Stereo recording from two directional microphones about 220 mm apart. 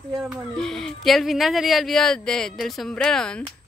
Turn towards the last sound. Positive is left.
turn(degrees=5)  # may be behind; listen again after turning